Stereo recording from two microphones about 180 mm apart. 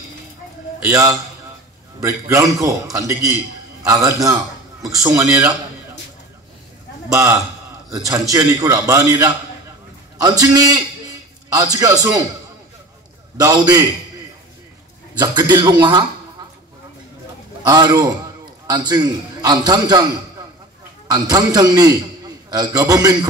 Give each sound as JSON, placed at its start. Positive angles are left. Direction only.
{"t": 0.8, "sound": "a man's voice", "side_deg": -15}
{"t": 7.1, "sound": "a man's voice", "side_deg": -15}
{"t": 13.4, "sound": "a man's voice", "side_deg": -20}
{"t": 15.5, "sound": "a man's voice", "side_deg": -25}
{"t": 17.6, "sound": "a man's voice", "side_deg": -20}
{"t": 21.1, "sound": "a man's voice", "side_deg": -20}